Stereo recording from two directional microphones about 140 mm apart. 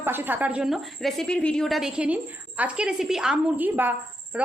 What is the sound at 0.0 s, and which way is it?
A woman's voice, 15° right (ahead or behind).